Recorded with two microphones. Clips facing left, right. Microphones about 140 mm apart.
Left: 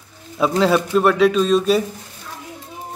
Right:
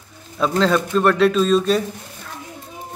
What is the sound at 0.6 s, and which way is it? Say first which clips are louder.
Speech: left 1 dB; 10° left (ahead or behind).